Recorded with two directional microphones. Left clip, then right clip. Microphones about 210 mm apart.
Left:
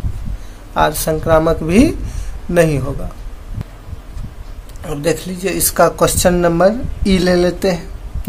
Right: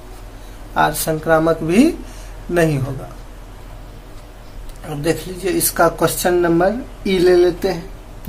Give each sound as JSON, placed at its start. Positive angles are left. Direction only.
{"t": 0.7, "sound": "a woman's voice", "side_deg": 30}
{"t": 4.8, "sound": "a woman's voice", "side_deg": 35}